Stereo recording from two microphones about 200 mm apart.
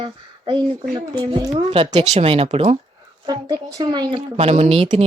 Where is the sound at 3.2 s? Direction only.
20° right (ahead or behind).